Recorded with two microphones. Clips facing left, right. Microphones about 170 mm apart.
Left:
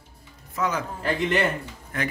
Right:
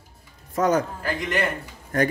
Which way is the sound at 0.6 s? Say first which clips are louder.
Right 6 dB; 45° right (ahead or behind).